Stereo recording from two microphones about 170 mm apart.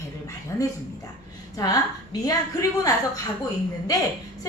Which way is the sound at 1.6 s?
20° left (ahead or behind).